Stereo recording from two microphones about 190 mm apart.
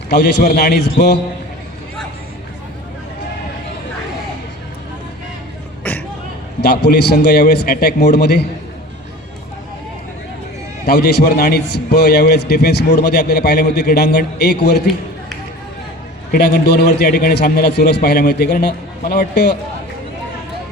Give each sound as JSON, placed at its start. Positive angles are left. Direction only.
{"t": 0.1, "sound": "a man's voice", "side_deg": 60}
{"t": 6.6, "sound": "a man's voice", "side_deg": 60}
{"t": 10.8, "sound": "a man's voice", "side_deg": 55}
{"t": 16.3, "sound": "a man's voice", "side_deg": 55}